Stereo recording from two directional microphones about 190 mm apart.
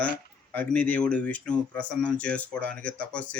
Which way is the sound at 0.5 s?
5° left (ahead or behind).